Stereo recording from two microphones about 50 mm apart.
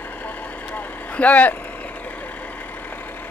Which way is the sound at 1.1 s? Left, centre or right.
Left.